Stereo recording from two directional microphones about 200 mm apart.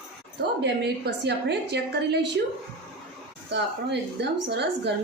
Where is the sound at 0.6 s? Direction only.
55° right (ahead or behind).